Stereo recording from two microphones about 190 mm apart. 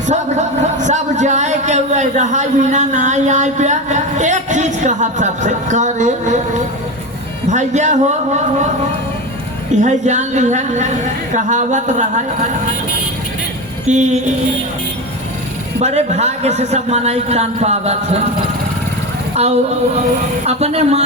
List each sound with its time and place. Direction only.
0.1 s a man's voice: 40° right (ahead or behind)
7.4 s a woman's voice: 40° right (ahead or behind)
9.8 s a woman's voice: 40° right (ahead or behind)
13.8 s a woman's voice: 40° right (ahead or behind)
15.8 s a woman's voice: 35° right (ahead or behind)
19.3 s a sound: 35° right (ahead or behind)
20.4 s a woman's voice: 35° right (ahead or behind)